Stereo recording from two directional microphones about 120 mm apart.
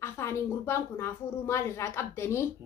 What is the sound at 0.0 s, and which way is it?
A woman's voice, 20° left (ahead or behind).